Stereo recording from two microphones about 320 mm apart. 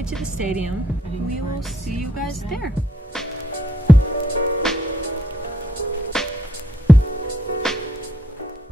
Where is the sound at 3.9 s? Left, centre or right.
Centre.